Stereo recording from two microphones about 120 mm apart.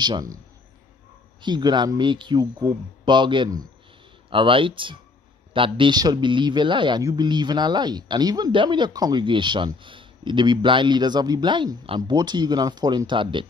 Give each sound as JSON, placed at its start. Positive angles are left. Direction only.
{"t": 0.0, "sound": "speech", "side_deg": -35}
{"t": 1.4, "sound": "speech", "side_deg": -35}
{"t": 4.3, "sound": "speech", "side_deg": -45}
{"t": 7.0, "sound": "a man's voice", "side_deg": -25}
{"t": 7.2, "sound": "speech", "side_deg": -35}
{"t": 12.0, "sound": "speech", "side_deg": -35}